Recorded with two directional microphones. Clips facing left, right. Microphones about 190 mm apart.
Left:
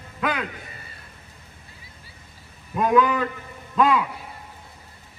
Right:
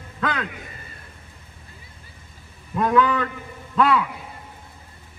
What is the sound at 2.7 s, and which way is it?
A man's voice, 10° left (ahead or behind).